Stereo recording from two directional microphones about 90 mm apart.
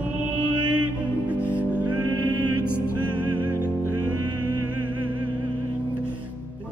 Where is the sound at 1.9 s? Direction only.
50° right (ahead or behind).